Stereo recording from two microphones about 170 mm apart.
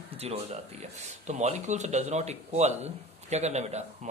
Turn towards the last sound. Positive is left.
turn(degrees=-40)  # may be behind; listen again after turning